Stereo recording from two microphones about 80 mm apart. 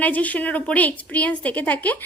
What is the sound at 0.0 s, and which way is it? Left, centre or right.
A woman's voice, centre.